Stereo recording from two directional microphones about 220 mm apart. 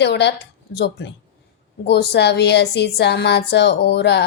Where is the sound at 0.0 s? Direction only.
50° left (ahead or behind).